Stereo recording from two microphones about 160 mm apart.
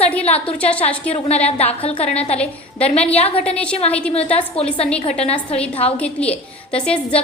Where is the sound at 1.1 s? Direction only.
40° left (ahead or behind).